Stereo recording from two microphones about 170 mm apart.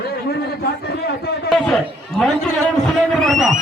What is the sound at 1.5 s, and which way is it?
Chatter, centre (ahead or behind).